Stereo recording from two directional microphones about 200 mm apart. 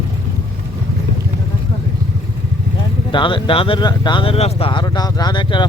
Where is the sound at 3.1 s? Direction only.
25° left (ahead or behind).